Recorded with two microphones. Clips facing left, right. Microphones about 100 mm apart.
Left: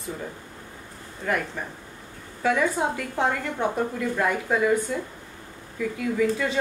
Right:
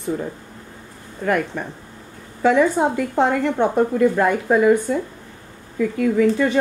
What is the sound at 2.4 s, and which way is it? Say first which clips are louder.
A woman's voice: right 7 dB; 60° right (ahead or behind).